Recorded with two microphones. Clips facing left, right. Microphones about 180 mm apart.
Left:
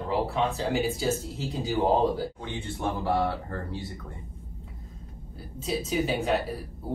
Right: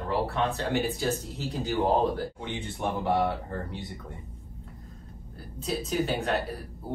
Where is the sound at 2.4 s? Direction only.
20° right (ahead or behind).